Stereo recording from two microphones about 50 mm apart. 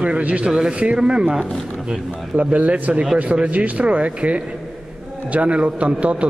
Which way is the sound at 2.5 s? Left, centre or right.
Right.